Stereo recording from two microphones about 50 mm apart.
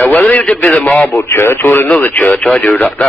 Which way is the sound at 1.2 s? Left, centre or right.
Left.